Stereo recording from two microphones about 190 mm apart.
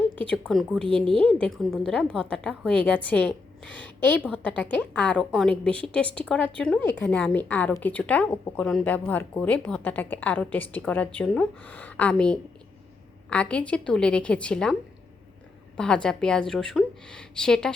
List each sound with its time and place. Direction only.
0.2 s a woman's voice: 5° left (ahead or behind)
16.0 s speech: 5° left (ahead or behind)